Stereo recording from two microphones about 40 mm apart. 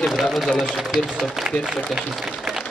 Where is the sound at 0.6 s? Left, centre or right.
Centre.